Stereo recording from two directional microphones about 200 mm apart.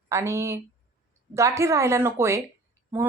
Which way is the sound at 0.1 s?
15° right (ahead or behind).